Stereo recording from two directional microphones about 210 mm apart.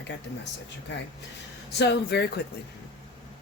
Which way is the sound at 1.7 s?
55° left (ahead or behind).